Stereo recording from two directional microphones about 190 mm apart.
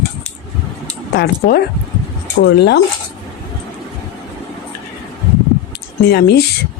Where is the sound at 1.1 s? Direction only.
55° left (ahead or behind).